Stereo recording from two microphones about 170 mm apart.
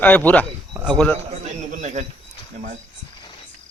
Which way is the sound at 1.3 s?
45° right (ahead or behind).